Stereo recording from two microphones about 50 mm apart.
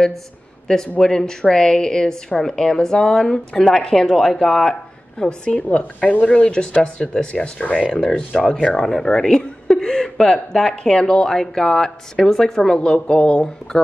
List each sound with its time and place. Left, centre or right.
0.7 s a woman's voice: centre
5.6 s a woman's voice: left